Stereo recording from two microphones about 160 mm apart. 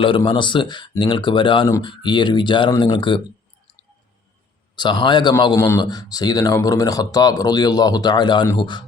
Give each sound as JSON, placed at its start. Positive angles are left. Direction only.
{"t": 0.3, "sound": "speech", "side_deg": 30}
{"t": 4.7, "sound": "speech", "side_deg": 30}